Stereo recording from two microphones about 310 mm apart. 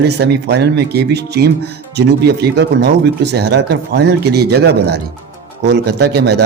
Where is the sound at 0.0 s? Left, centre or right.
Right.